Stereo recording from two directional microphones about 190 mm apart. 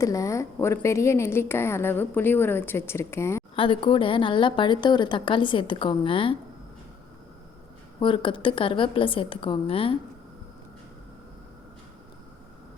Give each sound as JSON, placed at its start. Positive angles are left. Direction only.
{"t": 0.0, "sound": "a woman's voice", "side_deg": 15}
{"t": 3.5, "sound": "a woman's voice", "side_deg": 30}
{"t": 7.9, "sound": "a woman's voice", "side_deg": 25}